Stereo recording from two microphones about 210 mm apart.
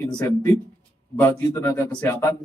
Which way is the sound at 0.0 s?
20° left (ahead or behind).